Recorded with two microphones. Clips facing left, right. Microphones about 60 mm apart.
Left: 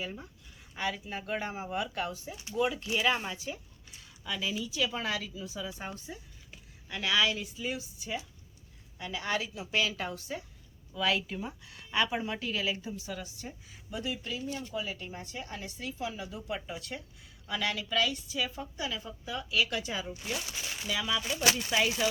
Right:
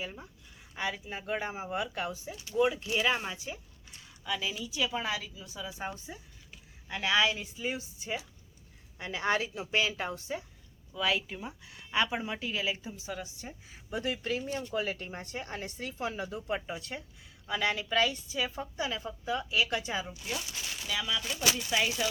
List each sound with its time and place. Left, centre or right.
0.0 s a woman's voice: centre
2.3 s speech: centre
2.6 s a woman's voice: centre
6.8 s a woman's voice: right
10.9 s a woman's voice: centre
13.9 s speech: right
14.5 s a woman's voice: right
16.6 s a woman's voice: right
20.3 s speech: centre